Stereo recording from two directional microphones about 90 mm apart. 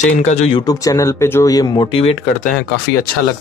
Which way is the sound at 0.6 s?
40° left (ahead or behind).